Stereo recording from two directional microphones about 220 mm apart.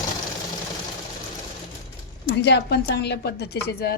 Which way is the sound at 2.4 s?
50° left (ahead or behind).